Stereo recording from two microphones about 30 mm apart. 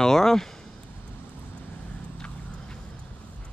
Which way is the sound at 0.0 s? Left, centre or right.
Centre.